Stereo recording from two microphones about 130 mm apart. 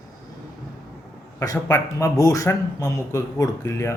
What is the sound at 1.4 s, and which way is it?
Speech, 25° left (ahead or behind).